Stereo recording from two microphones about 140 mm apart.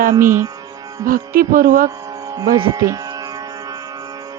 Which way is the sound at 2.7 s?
25° right (ahead or behind).